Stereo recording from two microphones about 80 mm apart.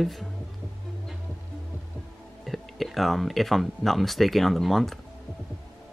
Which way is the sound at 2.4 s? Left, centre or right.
Centre.